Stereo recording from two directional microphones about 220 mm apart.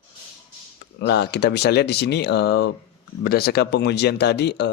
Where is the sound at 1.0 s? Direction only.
50° left (ahead or behind).